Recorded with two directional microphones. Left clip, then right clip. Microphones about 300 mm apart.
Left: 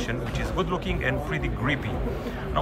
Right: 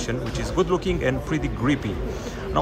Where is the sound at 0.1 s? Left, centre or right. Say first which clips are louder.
Right 3 dB; centre.